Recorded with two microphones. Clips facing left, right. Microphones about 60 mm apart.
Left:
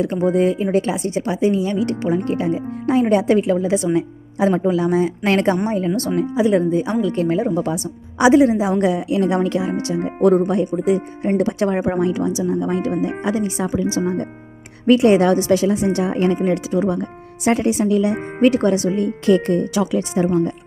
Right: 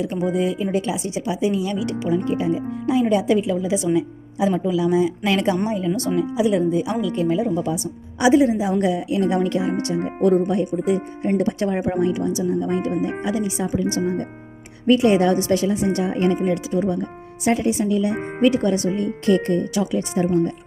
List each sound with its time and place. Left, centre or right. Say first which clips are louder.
0.2 s speech: left 5 dB; left
8.2 s a woman's voice: left 3 dB; left
12.9 s speech: left 2 dB; centre
14.8 s speech: left 3 dB; left
18.4 s a woman's voice: left 3 dB; left
18.9 s speech: left 3 dB; left